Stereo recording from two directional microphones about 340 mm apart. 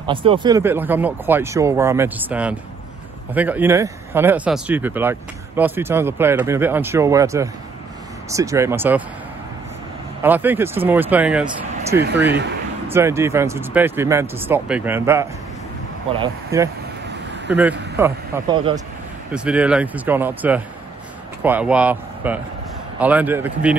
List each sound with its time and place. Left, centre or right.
0.0 s speech: centre
10.2 s speech: centre
19.3 s speech: centre